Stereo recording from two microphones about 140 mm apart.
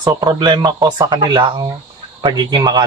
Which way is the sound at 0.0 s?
30° right (ahead or behind).